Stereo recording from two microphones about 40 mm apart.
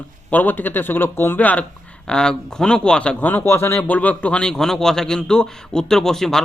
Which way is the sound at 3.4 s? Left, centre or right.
Left.